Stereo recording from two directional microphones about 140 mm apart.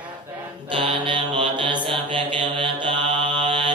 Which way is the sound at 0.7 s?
35° right (ahead or behind).